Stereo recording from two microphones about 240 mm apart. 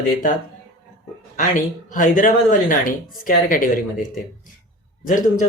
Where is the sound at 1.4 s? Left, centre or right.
Left.